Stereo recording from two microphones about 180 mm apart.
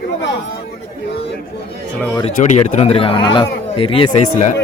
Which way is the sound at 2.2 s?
40° left (ahead or behind).